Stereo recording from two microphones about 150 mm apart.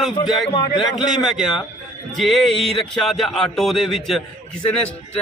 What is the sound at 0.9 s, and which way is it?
A man's voice, centre (ahead or behind).